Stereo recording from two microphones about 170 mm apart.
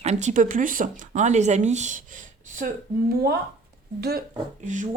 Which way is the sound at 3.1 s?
65° right (ahead or behind).